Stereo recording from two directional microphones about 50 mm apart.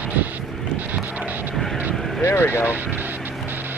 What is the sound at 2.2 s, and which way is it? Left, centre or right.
Vehicle, left.